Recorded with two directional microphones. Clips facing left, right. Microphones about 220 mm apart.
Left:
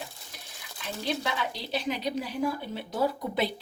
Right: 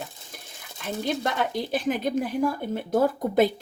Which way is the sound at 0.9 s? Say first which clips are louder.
Right 4 dB; 50° right (ahead or behind).